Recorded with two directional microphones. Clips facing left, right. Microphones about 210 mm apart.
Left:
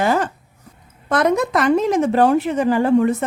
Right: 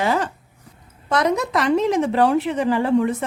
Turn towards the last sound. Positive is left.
turn(degrees=45)  # may be behind; listen again after turning